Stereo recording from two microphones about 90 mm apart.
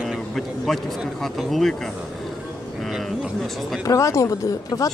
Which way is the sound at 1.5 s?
5° left (ahead or behind).